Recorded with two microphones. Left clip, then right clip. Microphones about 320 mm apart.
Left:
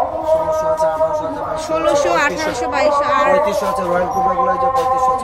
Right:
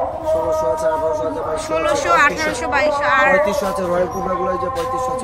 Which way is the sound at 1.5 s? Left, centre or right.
Centre.